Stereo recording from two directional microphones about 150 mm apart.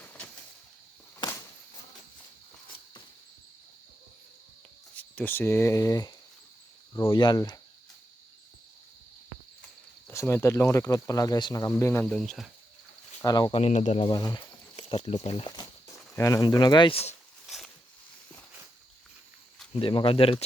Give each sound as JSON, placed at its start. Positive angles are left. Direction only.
{"t": 0.0, "sound": "a sound", "side_deg": 10}
{"t": 1.2, "sound": "a sound", "side_deg": 30}
{"t": 4.9, "sound": "speech", "side_deg": 10}
{"t": 7.1, "sound": "speech", "side_deg": 30}
{"t": 10.1, "sound": "speech", "side_deg": 15}
{"t": 12.0, "sound": "speech", "side_deg": 0}
{"t": 13.2, "sound": "speech", "side_deg": 25}
{"t": 13.5, "sound": "speech", "side_deg": 45}
{"t": 14.1, "sound": "speech", "side_deg": 25}
{"t": 16.1, "sound": "speech", "side_deg": 20}
{"t": 19.8, "sound": "speech", "side_deg": 35}